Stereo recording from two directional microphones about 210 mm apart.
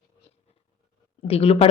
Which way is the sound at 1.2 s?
30° left (ahead or behind).